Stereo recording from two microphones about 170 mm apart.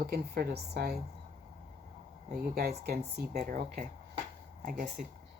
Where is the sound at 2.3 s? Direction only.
65° right (ahead or behind).